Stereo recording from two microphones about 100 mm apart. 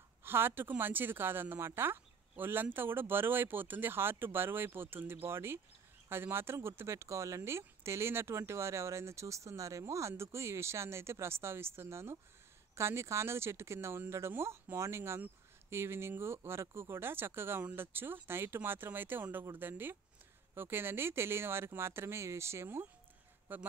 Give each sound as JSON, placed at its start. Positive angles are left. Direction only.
{"t": 0.2, "sound": "speech", "side_deg": -25}